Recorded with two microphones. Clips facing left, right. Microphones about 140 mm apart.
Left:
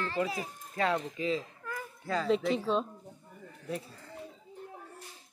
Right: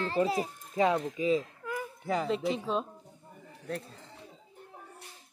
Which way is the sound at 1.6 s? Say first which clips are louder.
Right 4 dB; 20° right (ahead or behind).